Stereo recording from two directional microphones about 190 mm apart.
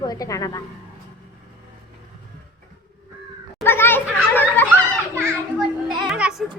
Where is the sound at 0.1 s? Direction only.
20° left (ahead or behind).